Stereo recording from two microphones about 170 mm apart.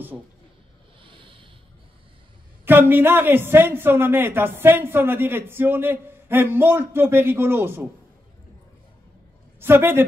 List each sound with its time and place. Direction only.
1.0 s a sound: 30° right (ahead or behind)
2.6 s a woman's voice: 10° right (ahead or behind)
9.6 s a woman's voice: 15° right (ahead or behind)